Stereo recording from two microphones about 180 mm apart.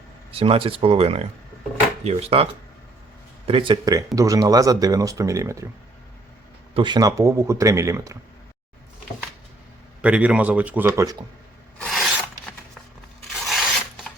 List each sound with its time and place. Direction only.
0.3 s speech: 30° right (ahead or behind)
6.7 s speech: 25° right (ahead or behind)
10.0 s speech: 5° right (ahead or behind)
11.8 s filing: centre (ahead or behind)
13.3 s a sound: centre (ahead or behind)